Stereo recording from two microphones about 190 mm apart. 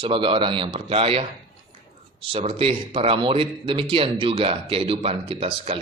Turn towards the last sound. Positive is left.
turn(degrees=-30)  # may be behind; listen again after turning